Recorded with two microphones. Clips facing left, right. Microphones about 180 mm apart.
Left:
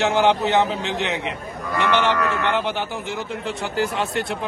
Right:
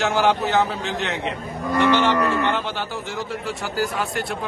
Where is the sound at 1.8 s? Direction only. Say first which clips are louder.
Right 1 dB; 15° right (ahead or behind).